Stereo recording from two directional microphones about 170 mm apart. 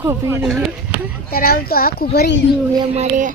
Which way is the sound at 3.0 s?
45° right (ahead or behind).